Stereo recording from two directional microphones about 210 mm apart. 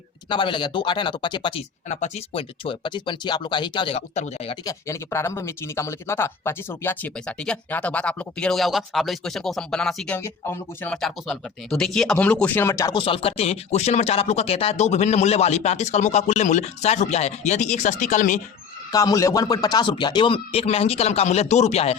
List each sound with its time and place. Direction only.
0.3 s speech: 20° left (ahead or behind)
4.6 s speech: 15° left (ahead or behind); by 18.3 s 35° left (ahead or behind)
18.9 s speech: 15° left (ahead or behind)